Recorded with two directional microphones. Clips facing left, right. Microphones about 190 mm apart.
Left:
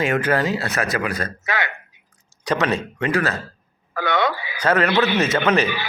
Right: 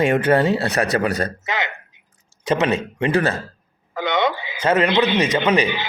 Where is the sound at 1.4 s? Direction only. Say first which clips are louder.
Even; 20° right (ahead or behind).